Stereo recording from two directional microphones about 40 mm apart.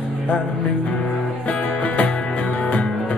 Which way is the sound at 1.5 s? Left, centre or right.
Left.